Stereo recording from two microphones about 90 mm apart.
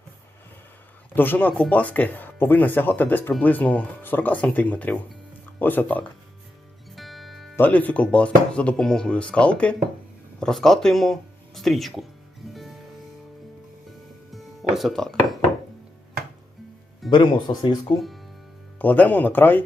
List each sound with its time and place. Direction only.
1.1 s speech: 20° left (ahead or behind)
6.9 s music: centre (ahead or behind)
7.5 s speech: 20° left (ahead or behind); by 12.0 s centre (ahead or behind)
14.3 s music: centre (ahead or behind)
17.1 s speech: 60° left (ahead or behind)
17.9 s speech: centre (ahead or behind)
18.8 s speech: 20° left (ahead or behind)